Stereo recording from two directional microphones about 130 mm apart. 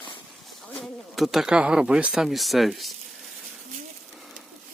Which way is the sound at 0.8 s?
Centre (ahead or behind).